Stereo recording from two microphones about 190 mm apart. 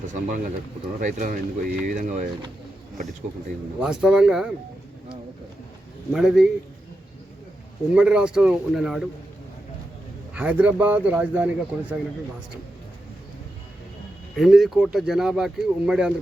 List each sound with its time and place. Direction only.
1.0 s speech: 45° right (ahead or behind)
3.8 s speech: 5° right (ahead or behind)
6.1 s speech: 5° right (ahead or behind)
7.9 s speech: 5° right (ahead or behind)
10.3 s speech: 5° right (ahead or behind)
14.3 s speech: centre (ahead or behind)